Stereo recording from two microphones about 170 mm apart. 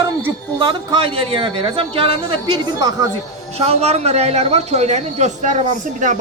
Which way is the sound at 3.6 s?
40° right (ahead or behind).